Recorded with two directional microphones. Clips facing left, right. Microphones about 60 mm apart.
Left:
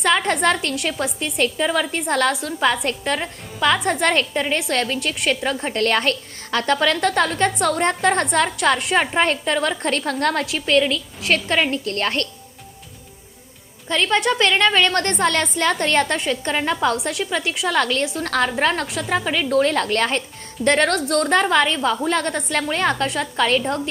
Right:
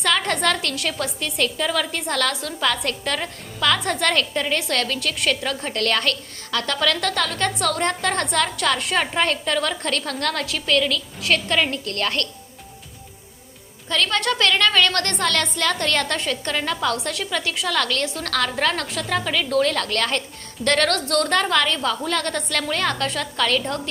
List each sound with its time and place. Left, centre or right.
0.0 s a woman's voice: left
13.8 s a woman's voice: left